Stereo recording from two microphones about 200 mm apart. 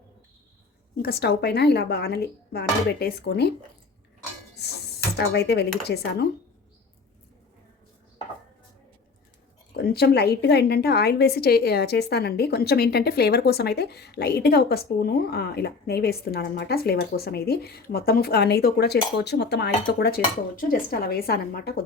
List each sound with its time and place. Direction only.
0.9 s speech: 50° left (ahead or behind)
4.6 s speech: 55° left (ahead or behind)
9.7 s a woman's voice: 50° left (ahead or behind)